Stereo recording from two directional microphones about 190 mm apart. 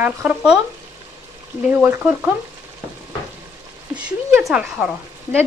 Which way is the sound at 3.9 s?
5° right (ahead or behind).